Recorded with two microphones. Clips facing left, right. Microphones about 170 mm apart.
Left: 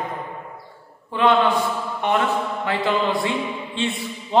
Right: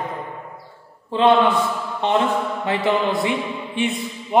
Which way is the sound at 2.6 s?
20° right (ahead or behind).